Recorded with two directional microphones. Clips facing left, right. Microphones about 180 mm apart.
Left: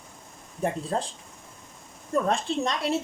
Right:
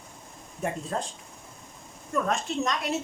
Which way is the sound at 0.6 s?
35° left (ahead or behind).